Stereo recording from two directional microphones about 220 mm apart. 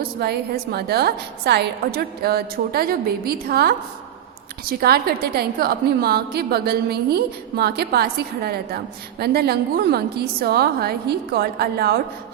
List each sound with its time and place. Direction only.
0.0 s a woman's voice: 45° right (ahead or behind)